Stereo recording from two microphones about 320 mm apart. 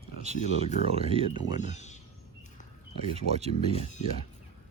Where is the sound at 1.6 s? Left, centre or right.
Left.